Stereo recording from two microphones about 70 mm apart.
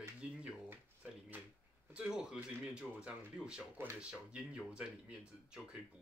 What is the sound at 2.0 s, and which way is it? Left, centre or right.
Speech, centre.